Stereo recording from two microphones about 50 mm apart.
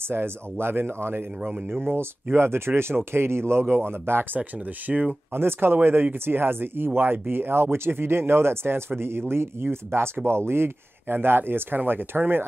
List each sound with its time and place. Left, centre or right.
0.1 s speech: right
4.4 s speech: right
5.3 s speech: right